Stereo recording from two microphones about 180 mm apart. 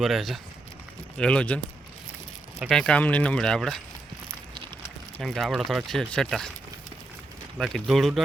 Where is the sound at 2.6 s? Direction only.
5° left (ahead or behind).